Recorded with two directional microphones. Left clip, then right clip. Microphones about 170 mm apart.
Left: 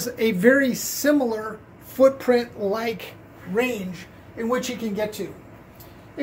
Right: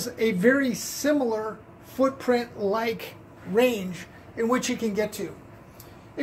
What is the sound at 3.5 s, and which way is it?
Speech, 55° right (ahead or behind).